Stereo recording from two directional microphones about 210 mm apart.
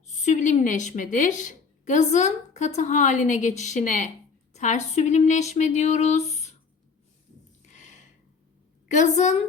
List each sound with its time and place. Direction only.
0.3 s a woman's voice: 35° left (ahead or behind)
7.7 s a sound: 35° left (ahead or behind)
8.9 s a woman's voice: 35° left (ahead or behind)